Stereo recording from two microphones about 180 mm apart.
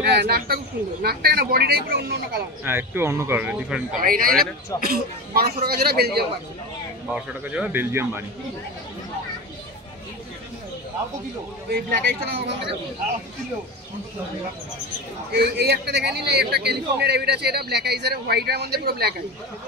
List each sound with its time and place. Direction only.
0.1 s a man's voice: 60° right (ahead or behind)
2.6 s speech: 10° right (ahead or behind)
4.0 s a man's voice: 50° right (ahead or behind)
7.1 s speech: 5° right (ahead or behind)
11.7 s a man's voice: 60° right (ahead or behind)
15.3 s a man's voice: 65° right (ahead or behind)